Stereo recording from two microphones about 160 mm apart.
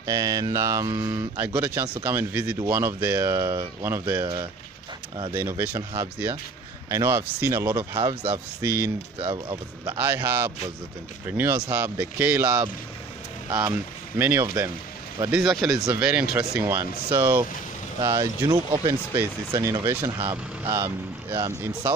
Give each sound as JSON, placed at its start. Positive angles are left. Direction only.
{"t": 0.0, "sound": "speech", "side_deg": -20}
{"t": 5.3, "sound": "speech", "side_deg": -15}
{"t": 9.2, "sound": "speech", "side_deg": -35}
{"t": 9.8, "sound": "speech", "side_deg": -10}
{"t": 14.1, "sound": "speech", "side_deg": -10}
{"t": 15.3, "sound": "speech", "side_deg": 0}